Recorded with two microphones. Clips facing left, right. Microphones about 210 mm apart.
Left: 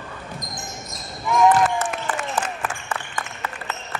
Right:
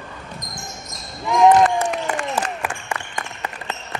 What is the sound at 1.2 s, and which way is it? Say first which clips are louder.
Basketball bounce: right 3 dB; 20° right (ahead or behind).